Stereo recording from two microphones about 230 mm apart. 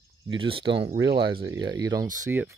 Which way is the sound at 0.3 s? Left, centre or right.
Right.